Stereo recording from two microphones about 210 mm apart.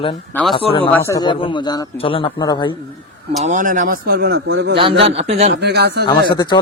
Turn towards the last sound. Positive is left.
turn(degrees=20)  # may be behind; listen again after turning